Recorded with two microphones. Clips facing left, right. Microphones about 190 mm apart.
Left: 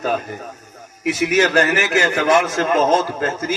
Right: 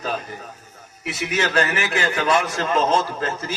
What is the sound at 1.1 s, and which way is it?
A man's voice, 45° left (ahead or behind).